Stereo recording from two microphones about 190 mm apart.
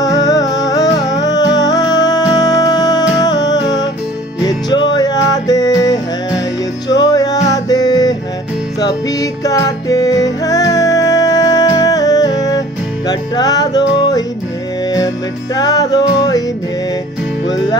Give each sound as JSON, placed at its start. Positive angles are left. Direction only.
{"t": 0.0, "sound": "music", "side_deg": 20}
{"t": 15.5, "sound": "music", "side_deg": 20}